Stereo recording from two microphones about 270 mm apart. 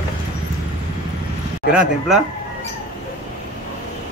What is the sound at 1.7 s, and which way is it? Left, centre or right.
Speech, centre.